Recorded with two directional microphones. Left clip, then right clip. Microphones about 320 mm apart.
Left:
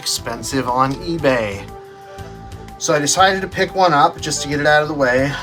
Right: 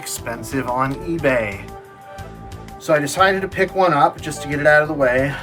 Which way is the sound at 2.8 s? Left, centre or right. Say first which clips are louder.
Left 2 dB; centre.